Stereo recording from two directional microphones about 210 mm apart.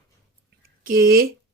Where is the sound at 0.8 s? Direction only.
45° right (ahead or behind).